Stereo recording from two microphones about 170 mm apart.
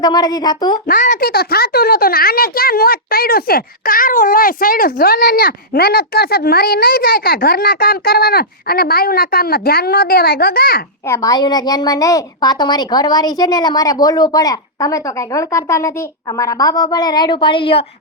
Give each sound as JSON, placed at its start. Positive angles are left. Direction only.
{"t": 0.0, "sound": "a woman's voice", "side_deg": 25}
{"t": 0.9, "sound": "a child's voice", "side_deg": 50}
{"t": 1.3, "sound": "speech", "side_deg": 65}
{"t": 11.0, "sound": "a woman's voice", "side_deg": 20}